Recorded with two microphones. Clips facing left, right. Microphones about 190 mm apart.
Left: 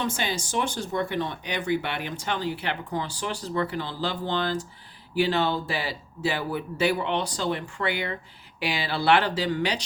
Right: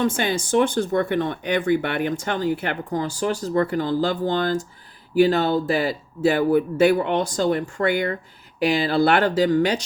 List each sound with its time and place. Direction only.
0.0 s speech: 55° right (ahead or behind)